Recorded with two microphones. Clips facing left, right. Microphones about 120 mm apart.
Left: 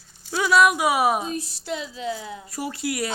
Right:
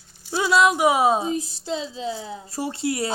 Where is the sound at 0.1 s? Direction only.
15° right (ahead or behind).